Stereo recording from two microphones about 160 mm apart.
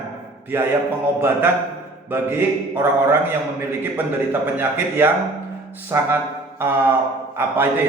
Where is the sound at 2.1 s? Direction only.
15° right (ahead or behind).